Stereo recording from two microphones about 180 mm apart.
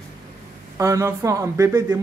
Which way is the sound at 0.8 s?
15° right (ahead or behind).